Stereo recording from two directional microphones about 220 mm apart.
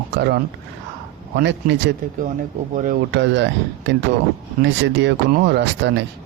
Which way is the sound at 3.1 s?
50° right (ahead or behind).